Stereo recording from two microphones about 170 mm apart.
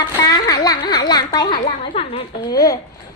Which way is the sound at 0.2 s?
20° left (ahead or behind).